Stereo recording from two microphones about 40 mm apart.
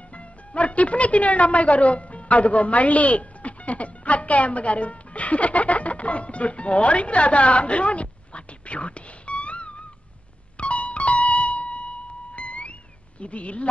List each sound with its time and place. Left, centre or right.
0.1 s speech: left
10.6 s music: left
13.2 s speech: left